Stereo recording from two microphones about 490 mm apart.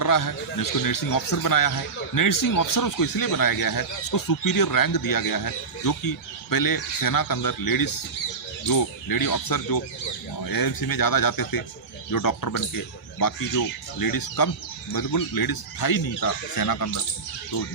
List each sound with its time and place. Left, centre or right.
0.0 s speech: left